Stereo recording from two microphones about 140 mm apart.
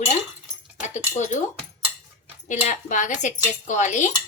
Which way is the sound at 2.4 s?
60° left (ahead or behind).